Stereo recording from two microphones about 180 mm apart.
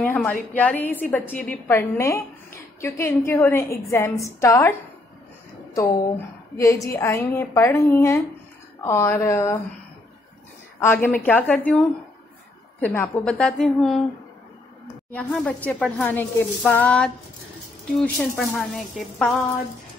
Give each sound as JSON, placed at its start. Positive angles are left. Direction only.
{"t": 0.0, "sound": "a woman's voice", "side_deg": 10}
{"t": 6.6, "sound": "speech", "side_deg": 15}
{"t": 10.8, "sound": "a woman's voice", "side_deg": 10}
{"t": 15.1, "sound": "a woman's voice", "side_deg": 10}